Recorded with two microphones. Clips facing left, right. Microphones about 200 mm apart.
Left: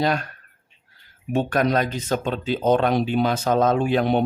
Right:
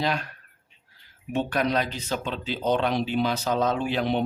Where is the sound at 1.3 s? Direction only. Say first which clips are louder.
Left 4 dB; 45° left (ahead or behind).